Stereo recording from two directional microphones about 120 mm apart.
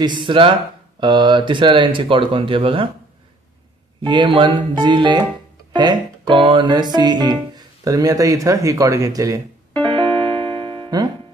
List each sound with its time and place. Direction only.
0.0 s speech: 40° right (ahead or behind)
4.0 s music: 40° right (ahead or behind); by 9.4 s 25° right (ahead or behind)
9.8 s music: 45° right (ahead or behind)